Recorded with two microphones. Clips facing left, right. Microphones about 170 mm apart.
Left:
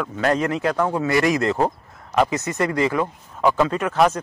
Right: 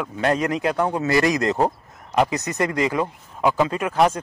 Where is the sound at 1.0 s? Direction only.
20° left (ahead or behind).